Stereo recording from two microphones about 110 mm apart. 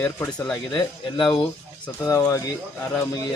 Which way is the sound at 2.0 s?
30° left (ahead or behind).